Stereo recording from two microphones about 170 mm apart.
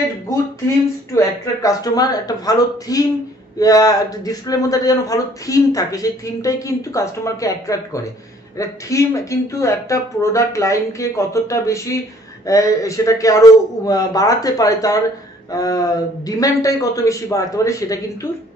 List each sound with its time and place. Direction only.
1.1 s a man's voice: 20° left (ahead or behind)